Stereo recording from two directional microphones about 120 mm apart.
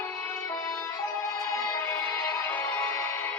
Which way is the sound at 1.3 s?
25° left (ahead or behind).